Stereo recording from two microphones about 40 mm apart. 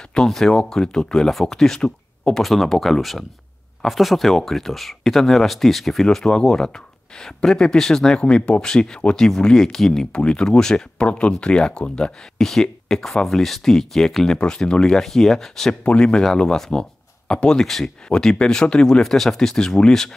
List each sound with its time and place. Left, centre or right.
0.3 s speech: centre
8.3 s speech: left
10.1 s speech: left
11.1 s speech: left
12.4 s speech: centre
14.4 s speech: left
15.8 s speech: left
17.6 s speech: centre